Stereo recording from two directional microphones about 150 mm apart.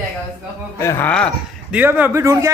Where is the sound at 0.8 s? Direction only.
15° left (ahead or behind).